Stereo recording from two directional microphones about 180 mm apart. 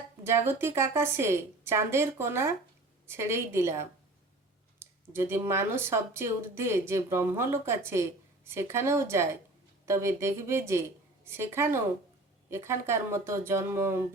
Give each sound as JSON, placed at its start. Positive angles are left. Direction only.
{"t": 0.3, "sound": "speech", "side_deg": -15}